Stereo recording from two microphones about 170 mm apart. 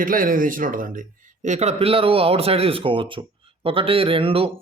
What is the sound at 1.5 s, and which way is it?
Speech, 40° right (ahead or behind).